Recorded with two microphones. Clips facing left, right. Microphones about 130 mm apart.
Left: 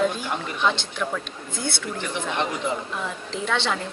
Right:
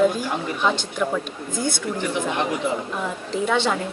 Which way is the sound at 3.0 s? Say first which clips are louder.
Right 5 dB; 10° right (ahead or behind).